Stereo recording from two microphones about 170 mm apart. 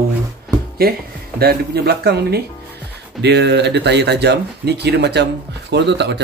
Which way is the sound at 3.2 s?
85° right.